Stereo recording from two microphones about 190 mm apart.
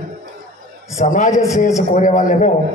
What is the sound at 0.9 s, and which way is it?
A man's voice, 40° left (ahead or behind).